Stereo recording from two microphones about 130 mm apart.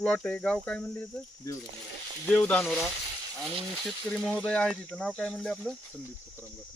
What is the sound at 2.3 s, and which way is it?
Speech, 10° left (ahead or behind).